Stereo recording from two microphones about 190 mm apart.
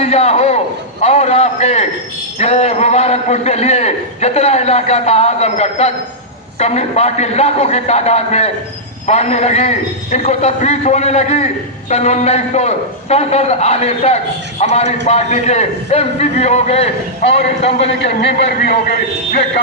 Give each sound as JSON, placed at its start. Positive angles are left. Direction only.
{"t": 0.0, "sound": "a man's voice", "side_deg": 35}
{"t": 18.0, "sound": "a man's voice", "side_deg": 60}